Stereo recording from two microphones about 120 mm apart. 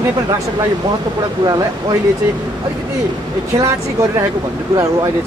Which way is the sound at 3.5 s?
30° right (ahead or behind).